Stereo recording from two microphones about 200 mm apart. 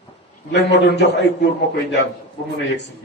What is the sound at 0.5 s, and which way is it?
Speech, 60° left (ahead or behind).